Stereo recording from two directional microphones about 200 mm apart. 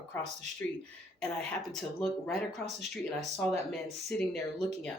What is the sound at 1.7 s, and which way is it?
Speech, 5° left (ahead or behind).